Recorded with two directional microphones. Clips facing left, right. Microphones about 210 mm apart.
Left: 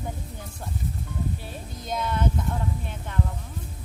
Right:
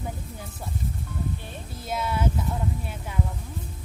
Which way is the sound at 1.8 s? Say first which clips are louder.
Even; 5° right (ahead or behind).